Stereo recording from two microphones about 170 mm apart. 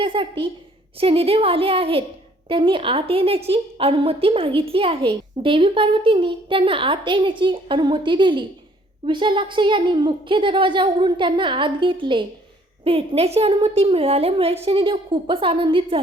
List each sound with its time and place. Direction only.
0.0 s a woman's voice: 30° right (ahead or behind)